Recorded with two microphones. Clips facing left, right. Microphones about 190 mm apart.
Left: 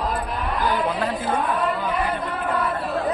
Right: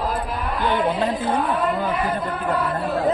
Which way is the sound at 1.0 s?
25° right (ahead or behind).